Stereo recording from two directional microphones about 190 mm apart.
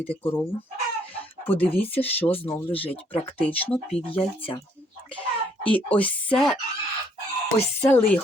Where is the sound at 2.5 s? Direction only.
10° left (ahead or behind).